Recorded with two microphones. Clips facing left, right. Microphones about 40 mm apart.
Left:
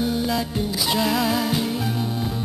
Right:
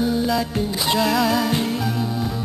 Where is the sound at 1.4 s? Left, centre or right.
Centre.